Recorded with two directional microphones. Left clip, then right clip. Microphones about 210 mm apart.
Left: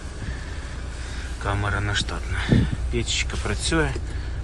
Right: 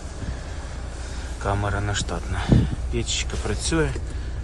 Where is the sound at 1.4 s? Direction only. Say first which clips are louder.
Even; 15° right (ahead or behind).